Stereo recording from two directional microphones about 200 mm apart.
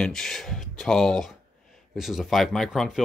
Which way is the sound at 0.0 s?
5° left (ahead or behind).